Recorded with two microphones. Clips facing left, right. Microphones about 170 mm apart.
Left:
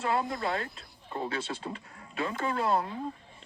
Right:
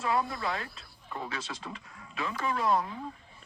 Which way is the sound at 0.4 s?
30° left (ahead or behind).